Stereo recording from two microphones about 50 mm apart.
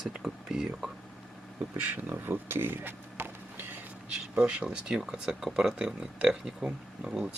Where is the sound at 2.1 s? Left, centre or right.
Right.